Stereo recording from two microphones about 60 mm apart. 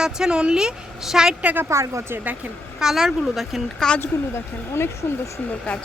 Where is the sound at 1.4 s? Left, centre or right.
Right.